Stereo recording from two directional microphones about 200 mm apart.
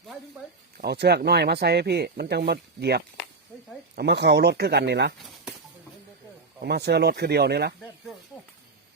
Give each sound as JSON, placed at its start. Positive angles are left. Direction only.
{"t": 0.8, "sound": "speech", "side_deg": -55}
{"t": 6.6, "sound": "speech", "side_deg": -55}